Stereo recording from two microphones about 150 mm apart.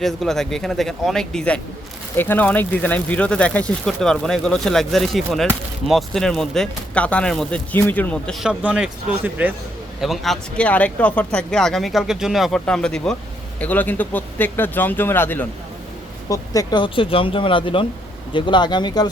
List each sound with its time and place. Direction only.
0.0 s speech: centre (ahead or behind)
8.4 s a man's voice: 5° right (ahead or behind)
10.0 s speech: centre (ahead or behind); by 19.0 s 30° left (ahead or behind)